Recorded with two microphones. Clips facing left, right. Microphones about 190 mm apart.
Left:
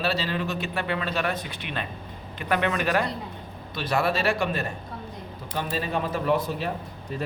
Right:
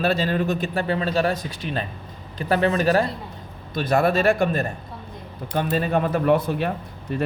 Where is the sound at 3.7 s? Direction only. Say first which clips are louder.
Right 6 dB; 50° right (ahead or behind).